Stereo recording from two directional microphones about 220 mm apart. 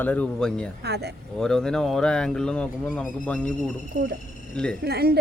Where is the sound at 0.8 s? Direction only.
50° right (ahead or behind).